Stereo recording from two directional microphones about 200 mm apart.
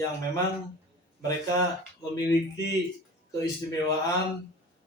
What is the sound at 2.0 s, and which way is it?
A man's voice, 15° left (ahead or behind).